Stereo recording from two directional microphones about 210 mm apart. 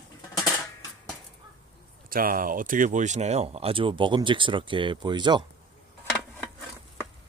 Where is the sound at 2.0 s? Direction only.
45° right (ahead or behind); by 5.4 s 20° right (ahead or behind).